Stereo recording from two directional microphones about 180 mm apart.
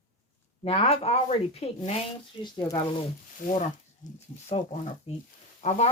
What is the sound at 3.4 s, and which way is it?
Speech, 50° left (ahead or behind).